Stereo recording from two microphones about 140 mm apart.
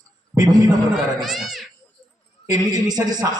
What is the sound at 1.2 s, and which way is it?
Speech, centre (ahead or behind).